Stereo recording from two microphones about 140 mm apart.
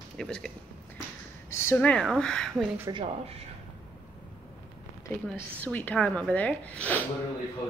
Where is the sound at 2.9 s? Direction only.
25° right (ahead or behind).